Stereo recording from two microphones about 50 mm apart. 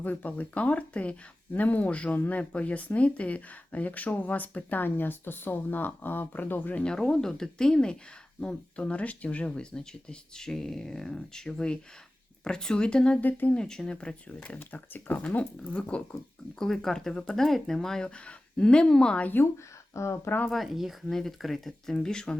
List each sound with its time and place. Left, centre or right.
0.0 s speech: left
6.8 s speech: centre
13.2 s speech: left
13.5 s speech: centre
14.7 s speech: left
15.3 s speech: left
16.6 s speech: centre
19.9 s speech: left
20.5 s speech: centre
21.1 s speech: centre
21.9 s speech: centre